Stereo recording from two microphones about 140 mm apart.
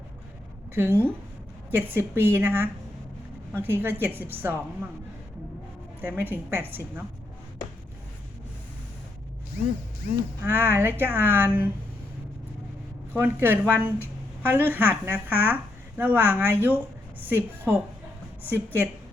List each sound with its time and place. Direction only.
0.7 s a woman's voice: 15° right (ahead or behind)
6.0 s a woman's voice: 15° right (ahead or behind)
10.4 s a woman's voice: 15° right (ahead or behind)
13.1 s a woman's voice: 15° right (ahead or behind)